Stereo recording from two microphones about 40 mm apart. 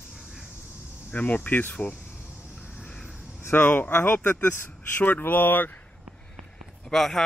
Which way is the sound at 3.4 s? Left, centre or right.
Left.